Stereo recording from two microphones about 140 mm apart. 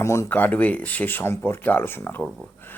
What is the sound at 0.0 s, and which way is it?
Speech, 20° left (ahead or behind).